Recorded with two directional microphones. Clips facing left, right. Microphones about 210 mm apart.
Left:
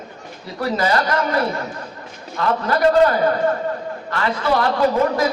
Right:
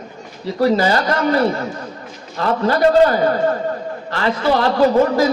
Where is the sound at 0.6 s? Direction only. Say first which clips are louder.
Right 4 dB; 30° right (ahead or behind).